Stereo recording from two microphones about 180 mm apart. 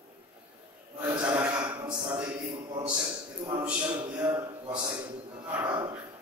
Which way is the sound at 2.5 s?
25° right (ahead or behind).